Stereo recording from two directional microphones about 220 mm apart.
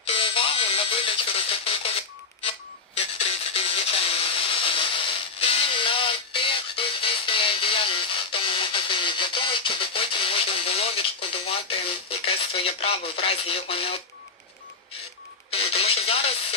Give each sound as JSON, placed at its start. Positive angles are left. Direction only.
{"t": 0.1, "sound": "music", "side_deg": 25}
{"t": 15.5, "sound": "radio", "side_deg": 25}